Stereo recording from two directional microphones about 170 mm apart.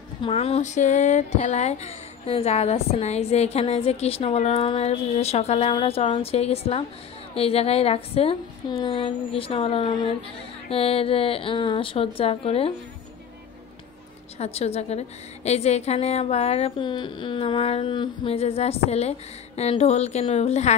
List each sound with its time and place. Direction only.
0.2 s speech: 35° left (ahead or behind)
14.4 s speech: 40° left (ahead or behind)